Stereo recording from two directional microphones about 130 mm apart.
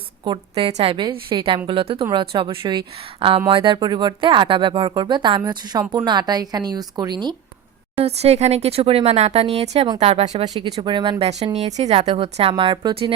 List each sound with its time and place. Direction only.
0.3 s a woman's voice: 45° right (ahead or behind)
8.0 s speech: 55° right (ahead or behind)
10.4 s a woman's voice: 30° right (ahead or behind)
11.5 s speech: 55° right (ahead or behind)